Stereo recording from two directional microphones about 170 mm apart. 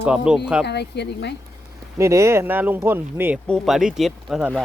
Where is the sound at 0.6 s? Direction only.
80° left.